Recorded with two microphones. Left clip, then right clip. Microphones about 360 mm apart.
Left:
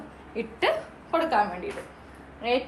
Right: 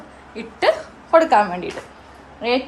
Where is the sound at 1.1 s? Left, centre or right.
Centre.